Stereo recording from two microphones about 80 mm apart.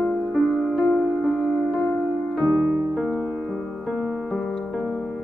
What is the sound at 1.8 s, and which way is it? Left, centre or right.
Music, left.